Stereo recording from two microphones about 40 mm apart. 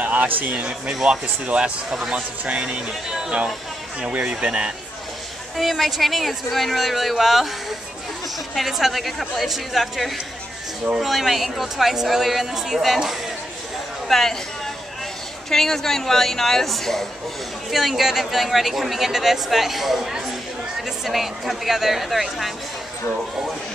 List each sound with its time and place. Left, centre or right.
0.0 s speech: right
1.0 s speech: right
2.6 s speech: centre
4.1 s speech: right
5.6 s speech: centre
8.5 s speech: centre
14.0 s speech: centre
15.5 s a woman's voice: centre
17.7 s speech: centre